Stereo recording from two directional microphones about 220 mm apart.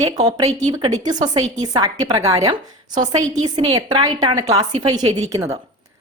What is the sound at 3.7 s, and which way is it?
A woman's voice, 20° right (ahead or behind).